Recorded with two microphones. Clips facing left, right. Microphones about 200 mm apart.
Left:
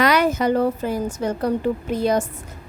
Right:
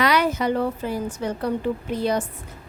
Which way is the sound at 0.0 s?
45° left (ahead or behind).